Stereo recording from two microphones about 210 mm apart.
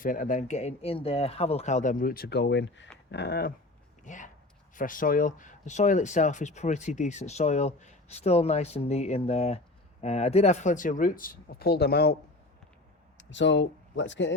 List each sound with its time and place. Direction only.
0.0 s speech: 40° left (ahead or behind); by 2.8 s 55° left (ahead or behind)
3.1 s a sound: 50° left (ahead or behind)
4.0 s speech: 35° left (ahead or behind)
13.1 s speech: 60° left (ahead or behind)